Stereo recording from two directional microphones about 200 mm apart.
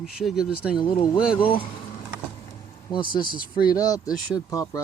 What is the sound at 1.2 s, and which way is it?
Speech, 5° right (ahead or behind).